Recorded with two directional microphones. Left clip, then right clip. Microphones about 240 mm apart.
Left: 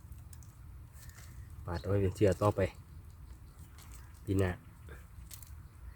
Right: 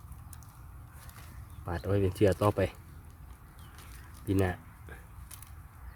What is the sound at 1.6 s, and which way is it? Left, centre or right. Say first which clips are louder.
Speech: right 3 dB; centre.